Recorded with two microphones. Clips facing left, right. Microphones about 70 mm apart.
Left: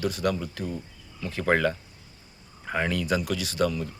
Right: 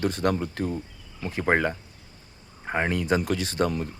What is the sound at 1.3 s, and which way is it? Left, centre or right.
Speech, right.